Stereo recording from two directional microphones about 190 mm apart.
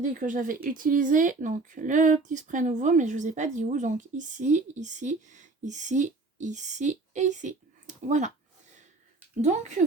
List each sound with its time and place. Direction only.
0.0 s speech: 45° right (ahead or behind)
9.4 s speech: 40° right (ahead or behind)